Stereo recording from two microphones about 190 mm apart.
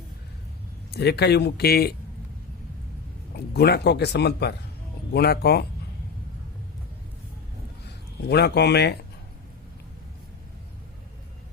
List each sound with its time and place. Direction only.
0.9 s speech: 60° left (ahead or behind)
3.3 s speech: 60° left (ahead or behind)
8.2 s speech: 60° left (ahead or behind)